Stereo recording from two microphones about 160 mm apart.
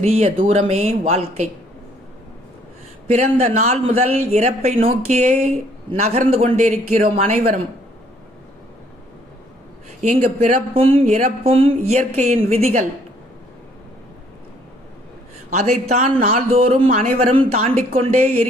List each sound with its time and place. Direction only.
0.0 s a man's voice: 40° right (ahead or behind)
3.1 s a man's voice: 45° right (ahead or behind)
10.0 s a man's voice: 40° right (ahead or behind)
15.9 s a man's voice: 40° right (ahead or behind)